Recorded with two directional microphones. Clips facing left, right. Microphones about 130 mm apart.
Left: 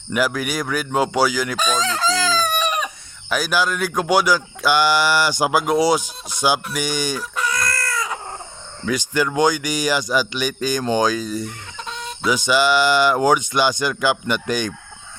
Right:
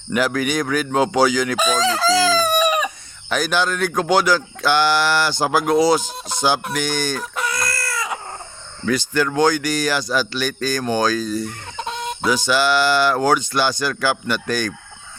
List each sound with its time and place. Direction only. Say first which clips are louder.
0.1 s speech: right 2 dB; 5° left (ahead or behind)
1.5 s chicken: right 3 dB; 5° right (ahead or behind)
3.2 s speech: even; 5° left (ahead or behind)
7.5 s a sound: left 1 dB; 5° right (ahead or behind)
8.9 s speech: right 1 dB; 15° left (ahead or behind)
11.8 s chicken: right 4 dB; 45° right (ahead or behind)
12.3 s speech: left 1 dB; 15° left (ahead or behind)